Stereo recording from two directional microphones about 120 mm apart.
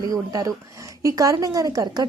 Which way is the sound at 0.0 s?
30° right (ahead or behind).